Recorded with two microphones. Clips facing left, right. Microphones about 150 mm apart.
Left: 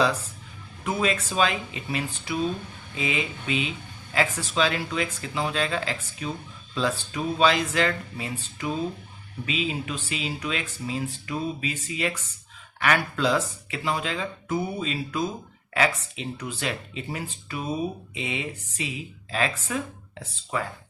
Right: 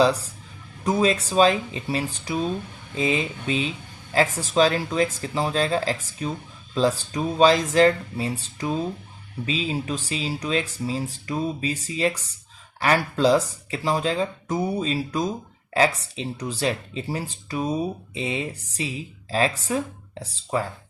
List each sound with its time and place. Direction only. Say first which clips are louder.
0.0 s speech: right 5 dB; 35° right (ahead or behind)